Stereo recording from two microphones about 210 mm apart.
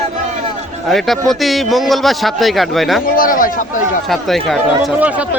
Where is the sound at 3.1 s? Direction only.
40° left (ahead or behind).